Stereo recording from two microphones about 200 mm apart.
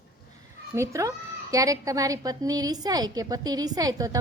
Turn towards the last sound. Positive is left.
turn(degrees=-20)  # may be behind; listen again after turning